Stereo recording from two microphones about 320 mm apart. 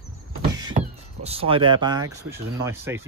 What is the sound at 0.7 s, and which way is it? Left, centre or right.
Speech, centre.